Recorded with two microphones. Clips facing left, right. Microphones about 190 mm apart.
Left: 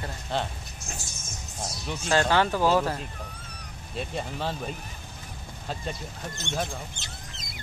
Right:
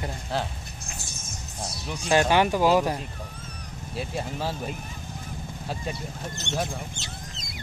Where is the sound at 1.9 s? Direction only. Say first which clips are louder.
Right 2 dB; 15° right (ahead or behind).